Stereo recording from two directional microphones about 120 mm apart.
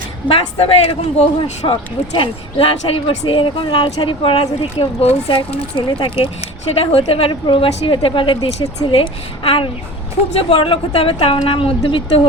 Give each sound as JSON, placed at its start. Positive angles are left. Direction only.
{"t": 0.3, "sound": "speech", "side_deg": 50}
{"t": 1.4, "sound": "speech", "side_deg": 45}